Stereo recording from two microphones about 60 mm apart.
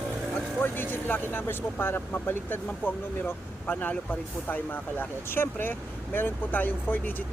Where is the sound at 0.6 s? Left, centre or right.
Left.